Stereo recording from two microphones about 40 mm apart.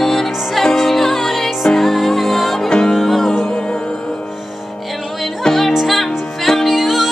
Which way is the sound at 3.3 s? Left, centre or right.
Centre.